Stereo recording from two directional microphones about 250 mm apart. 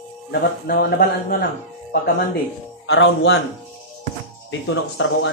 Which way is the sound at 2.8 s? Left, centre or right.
Left.